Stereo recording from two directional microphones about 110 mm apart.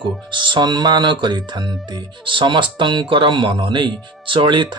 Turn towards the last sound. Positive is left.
turn(degrees=-50)  # may be behind; listen again after turning